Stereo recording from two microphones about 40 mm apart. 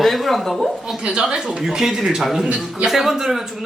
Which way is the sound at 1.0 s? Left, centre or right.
Right.